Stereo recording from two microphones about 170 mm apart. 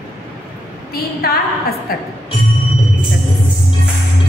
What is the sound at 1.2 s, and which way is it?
Speech, 65° left (ahead or behind).